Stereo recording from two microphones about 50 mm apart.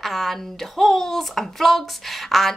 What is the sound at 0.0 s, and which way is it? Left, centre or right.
A woman's voice, centre.